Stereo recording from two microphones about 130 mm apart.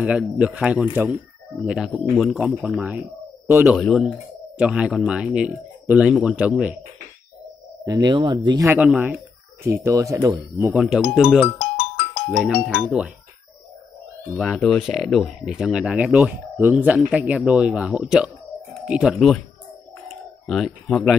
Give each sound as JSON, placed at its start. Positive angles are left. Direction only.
{"t": 0.0, "sound": "speech", "side_deg": -10}
{"t": 7.8, "sound": "speech", "side_deg": -30}
{"t": 8.6, "sound": "speech", "side_deg": -10}
{"t": 9.7, "sound": "speech", "side_deg": -25}
{"t": 11.5, "sound": "music", "side_deg": 45}
{"t": 12.3, "sound": "speech", "side_deg": -5}
{"t": 14.3, "sound": "speech", "side_deg": 0}
{"t": 20.1, "sound": "typing", "side_deg": 0}